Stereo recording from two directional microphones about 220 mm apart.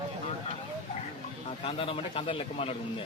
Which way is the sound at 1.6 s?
25° left (ahead or behind).